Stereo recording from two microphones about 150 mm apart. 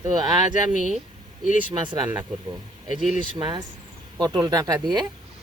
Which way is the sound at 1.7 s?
30° right (ahead or behind).